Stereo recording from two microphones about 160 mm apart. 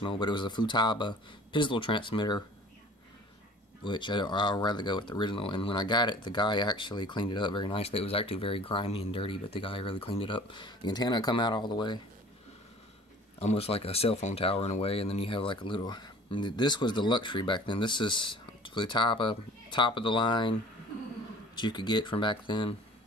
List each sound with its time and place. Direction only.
0.0 s speech: 30° left (ahead or behind)
3.8 s speech: 30° left (ahead or behind)
13.4 s speech: 40° left (ahead or behind)
21.5 s speech: 30° left (ahead or behind)